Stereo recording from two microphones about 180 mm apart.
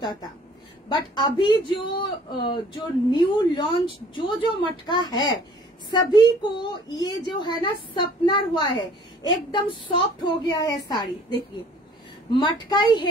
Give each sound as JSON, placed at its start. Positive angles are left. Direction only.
{"t": 0.8, "sound": "a man's voice", "side_deg": 25}